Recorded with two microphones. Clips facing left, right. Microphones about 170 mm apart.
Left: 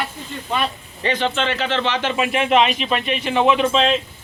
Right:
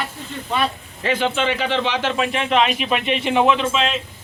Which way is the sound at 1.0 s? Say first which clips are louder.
Right 1 dB; 5° right (ahead or behind).